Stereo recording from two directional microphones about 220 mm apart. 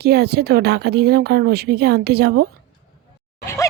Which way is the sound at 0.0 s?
45° right (ahead or behind).